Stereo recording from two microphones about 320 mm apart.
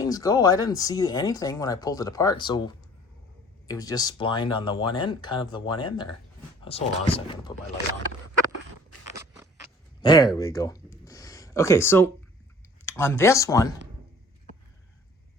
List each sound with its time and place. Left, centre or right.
0.0 s speech: centre
10.0 s speech: centre